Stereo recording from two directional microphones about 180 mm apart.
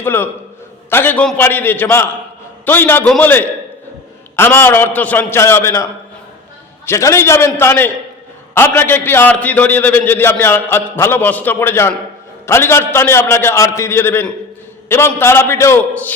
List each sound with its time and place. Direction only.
0.0 s a man's voice: 10° left (ahead or behind)